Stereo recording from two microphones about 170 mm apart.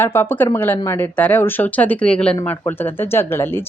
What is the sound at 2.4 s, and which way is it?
Speech, 15° left (ahead or behind).